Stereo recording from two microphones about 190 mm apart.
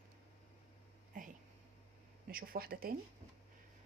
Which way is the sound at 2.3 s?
50° right (ahead or behind).